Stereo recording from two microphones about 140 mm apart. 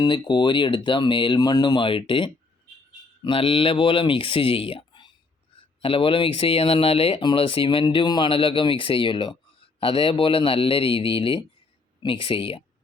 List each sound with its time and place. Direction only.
0.0 s speech: 30° left (ahead or behind)